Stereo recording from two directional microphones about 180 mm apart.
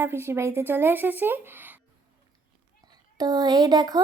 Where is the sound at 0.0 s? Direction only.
15° right (ahead or behind).